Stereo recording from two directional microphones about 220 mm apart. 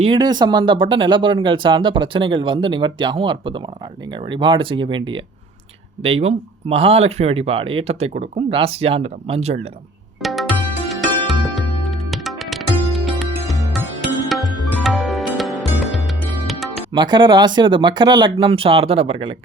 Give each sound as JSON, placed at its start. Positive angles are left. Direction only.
{"t": 0.0, "sound": "speech", "side_deg": -20}
{"t": 10.2, "sound": "music", "side_deg": 0}
{"t": 16.9, "sound": "speech", "side_deg": -20}